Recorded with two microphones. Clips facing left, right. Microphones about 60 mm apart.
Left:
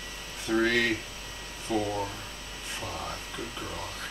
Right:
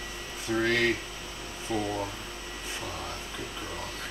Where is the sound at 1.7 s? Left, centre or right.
Right.